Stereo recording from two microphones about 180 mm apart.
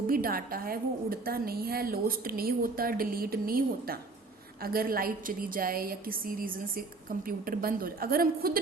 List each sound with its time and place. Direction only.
0.1 s a woman's voice: 55° right (ahead or behind)